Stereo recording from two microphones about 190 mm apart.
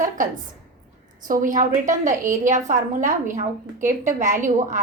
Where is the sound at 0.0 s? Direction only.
45° right (ahead or behind).